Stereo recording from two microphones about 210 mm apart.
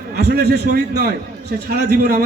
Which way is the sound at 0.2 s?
50° right (ahead or behind).